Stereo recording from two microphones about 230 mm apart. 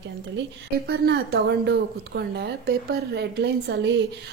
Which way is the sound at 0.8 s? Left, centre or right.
Right.